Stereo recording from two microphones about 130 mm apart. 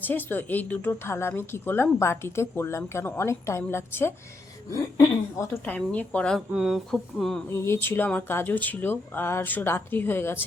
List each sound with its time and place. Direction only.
0.0 s a woman's voice: 15° left (ahead or behind)
5.6 s a woman's voice: 10° left (ahead or behind)
6.5 s speech: 5° right (ahead or behind)
7.5 s a woman's voice: 20° left (ahead or behind)